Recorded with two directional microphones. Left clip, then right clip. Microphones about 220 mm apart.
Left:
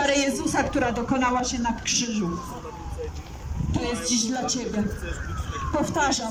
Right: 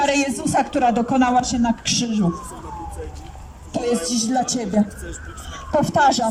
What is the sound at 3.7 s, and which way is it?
Speech, 45° right (ahead or behind).